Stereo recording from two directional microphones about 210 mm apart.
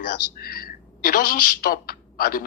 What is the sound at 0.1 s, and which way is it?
A woman's voice, 45° left (ahead or behind).